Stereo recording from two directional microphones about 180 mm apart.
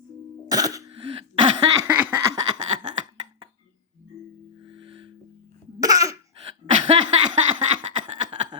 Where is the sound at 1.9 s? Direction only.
10° right (ahead or behind).